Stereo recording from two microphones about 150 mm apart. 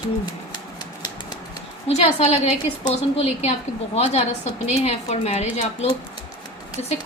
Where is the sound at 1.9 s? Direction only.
45° left (ahead or behind).